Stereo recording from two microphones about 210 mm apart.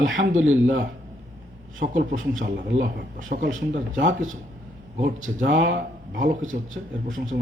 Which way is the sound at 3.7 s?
65° right (ahead or behind).